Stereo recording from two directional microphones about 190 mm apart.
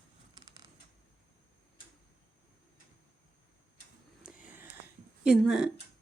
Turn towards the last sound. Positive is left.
turn(degrees=0)  # may be behind; listen again after turning